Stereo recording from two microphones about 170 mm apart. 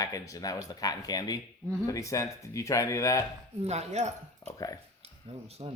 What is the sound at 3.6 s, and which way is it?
Speech, 40° right (ahead or behind).